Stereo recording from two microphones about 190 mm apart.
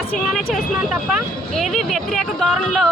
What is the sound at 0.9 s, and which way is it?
Speech, 5° right (ahead or behind).